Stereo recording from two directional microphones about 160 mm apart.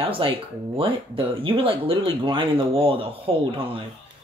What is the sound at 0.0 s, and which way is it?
Speech, 35° right (ahead or behind).